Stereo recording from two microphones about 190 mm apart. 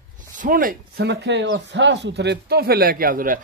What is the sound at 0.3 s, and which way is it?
Speech, 45° right (ahead or behind).